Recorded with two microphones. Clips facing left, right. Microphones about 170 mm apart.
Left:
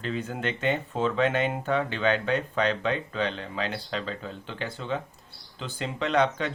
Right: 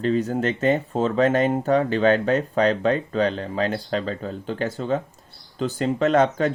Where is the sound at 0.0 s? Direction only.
40° right (ahead or behind).